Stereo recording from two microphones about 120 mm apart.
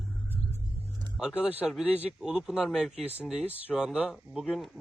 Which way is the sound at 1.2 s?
5° right (ahead or behind).